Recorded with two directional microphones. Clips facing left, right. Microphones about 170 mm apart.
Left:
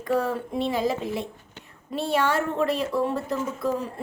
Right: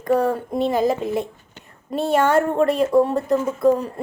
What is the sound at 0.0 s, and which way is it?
A woman's voice, 45° right (ahead or behind).